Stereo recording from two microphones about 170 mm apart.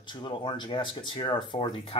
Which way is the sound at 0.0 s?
25° left (ahead or behind).